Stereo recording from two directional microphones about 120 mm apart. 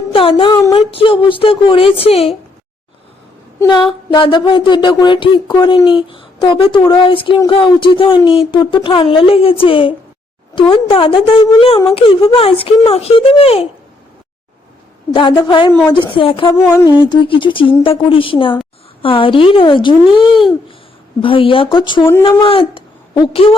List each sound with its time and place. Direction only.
0.1 s speech: 50° left (ahead or behind)
3.7 s a sound: 40° left (ahead or behind)
5.9 s speech: 45° left (ahead or behind)
15.1 s a sound: 40° left (ahead or behind)
15.9 s speech: 45° left (ahead or behind)
16.5 s a sound: 20° left (ahead or behind)
16.8 s speech: 35° left (ahead or behind)
20.2 s babbling: 5° right (ahead or behind)
21.2 s speech: 50° left (ahead or behind)